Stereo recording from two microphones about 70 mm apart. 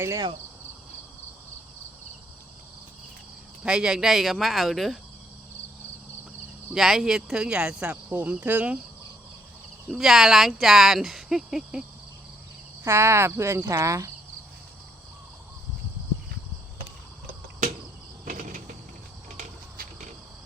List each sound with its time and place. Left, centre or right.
3.6 s speech: centre
6.7 s speech: centre; by 8.8 s right
9.9 s speech: centre
12.8 s speech: right